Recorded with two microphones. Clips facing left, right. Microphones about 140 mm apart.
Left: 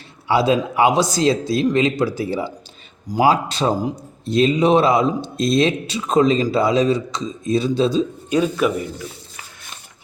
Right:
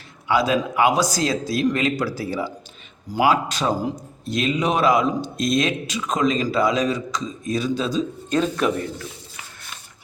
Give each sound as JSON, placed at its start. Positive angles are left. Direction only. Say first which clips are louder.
{"t": 0.3, "sound": "speech", "louder": "left 3 dB", "side_deg": 25}
{"t": 3.2, "sound": "speech", "louder": "left 3 dB", "side_deg": 35}
{"t": 8.3, "sound": "speech", "louder": "left 2 dB", "side_deg": 10}